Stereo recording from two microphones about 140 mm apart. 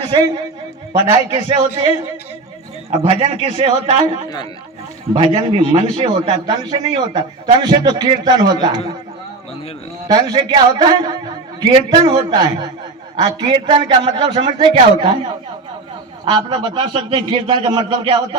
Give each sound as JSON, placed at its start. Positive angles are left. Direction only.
{"t": 0.1, "sound": "a man's voice", "side_deg": -35}
{"t": 2.9, "sound": "a man's voice", "side_deg": -50}
{"t": 6.4, "sound": "a man's voice", "side_deg": -35}
{"t": 10.1, "sound": "a man's voice", "side_deg": -30}
{"t": 16.3, "sound": "a man's voice", "side_deg": -35}